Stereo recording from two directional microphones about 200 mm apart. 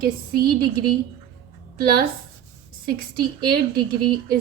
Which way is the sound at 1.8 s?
50° right (ahead or behind).